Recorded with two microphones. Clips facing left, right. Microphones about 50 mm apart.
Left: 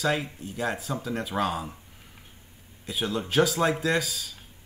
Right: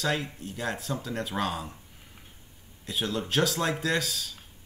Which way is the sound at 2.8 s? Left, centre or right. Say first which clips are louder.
Left 1 dB; centre.